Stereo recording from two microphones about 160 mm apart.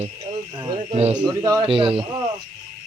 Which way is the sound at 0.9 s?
40° right (ahead or behind).